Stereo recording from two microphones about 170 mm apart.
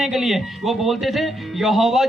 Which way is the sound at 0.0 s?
Centre (ahead or behind).